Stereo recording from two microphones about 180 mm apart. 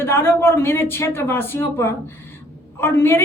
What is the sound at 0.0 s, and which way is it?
A woman's voice, 15° left (ahead or behind).